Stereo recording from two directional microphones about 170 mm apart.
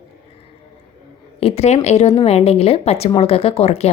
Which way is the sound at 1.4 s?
35° left (ahead or behind).